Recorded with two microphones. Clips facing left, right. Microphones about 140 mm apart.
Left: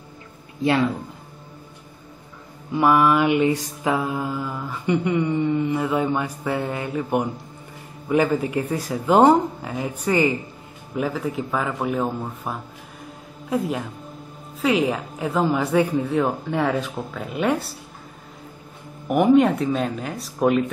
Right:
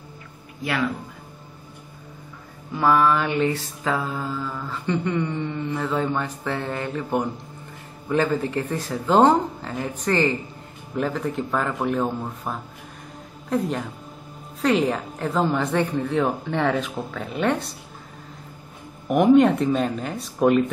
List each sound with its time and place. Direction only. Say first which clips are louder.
0.6 s speech: left 5 dB; 25° left (ahead or behind)
2.7 s mantra: left 2 dB; 15° left (ahead or behind)
11.0 s a woman's voice: even; 5° left (ahead or behind)
19.0 s a woman's voice: right 1 dB; 5° left (ahead or behind)